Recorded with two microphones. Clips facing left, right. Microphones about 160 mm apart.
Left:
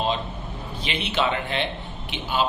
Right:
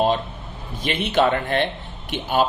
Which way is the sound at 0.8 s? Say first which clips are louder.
Right 6 dB; 45° right (ahead or behind).